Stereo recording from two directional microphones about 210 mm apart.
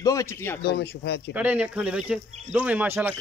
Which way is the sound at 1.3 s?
5° right (ahead or behind).